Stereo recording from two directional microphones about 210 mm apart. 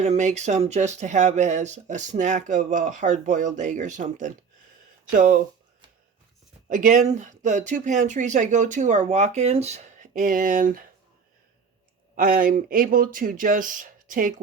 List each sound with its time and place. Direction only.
0.0 s speech: 35° right (ahead or behind)
6.7 s speech: 40° right (ahead or behind)
12.1 s speech: 40° right (ahead or behind)